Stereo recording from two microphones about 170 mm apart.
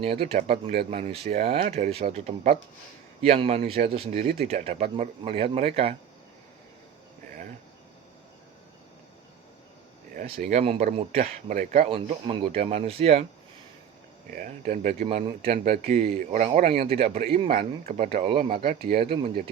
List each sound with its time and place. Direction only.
0.3 s speech: 35° right (ahead or behind)
10.2 s speech: 40° right (ahead or behind)
14.3 s speech: 50° right (ahead or behind)
15.0 s speech: 35° right (ahead or behind)
18.9 s speech: 60° right (ahead or behind)